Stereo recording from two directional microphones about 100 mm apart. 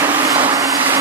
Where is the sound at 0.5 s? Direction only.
35° right (ahead or behind).